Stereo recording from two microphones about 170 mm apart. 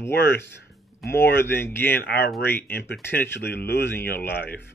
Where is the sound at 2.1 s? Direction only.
70° left (ahead or behind).